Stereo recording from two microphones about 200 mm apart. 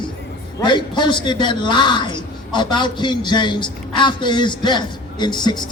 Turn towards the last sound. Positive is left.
turn(degrees=20)  # may be behind; listen again after turning